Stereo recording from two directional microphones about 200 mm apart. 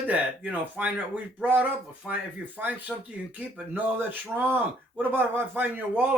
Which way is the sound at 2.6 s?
10° right (ahead or behind).